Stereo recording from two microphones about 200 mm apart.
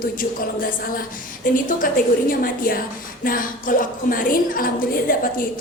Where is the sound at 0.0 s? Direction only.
45° left (ahead or behind).